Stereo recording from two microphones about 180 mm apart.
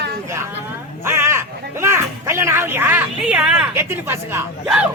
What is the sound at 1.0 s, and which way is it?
Speech, 15° right (ahead or behind).